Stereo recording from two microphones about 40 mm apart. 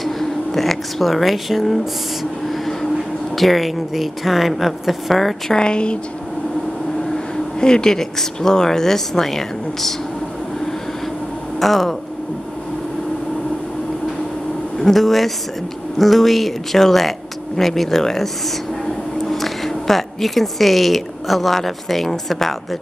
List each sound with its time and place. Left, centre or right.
0.0 s speech: centre
3.3 s speech: centre
5.5 s speech: left
7.6 s speech: centre
11.6 s speech: centre
14.8 s speech: centre
19.3 s speech: centre